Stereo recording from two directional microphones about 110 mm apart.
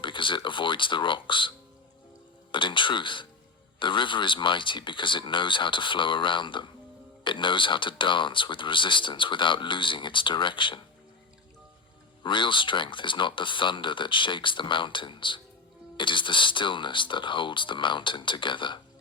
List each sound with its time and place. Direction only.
0.0 s speech: 50° left (ahead or behind)
12.2 s speech: 45° left (ahead or behind)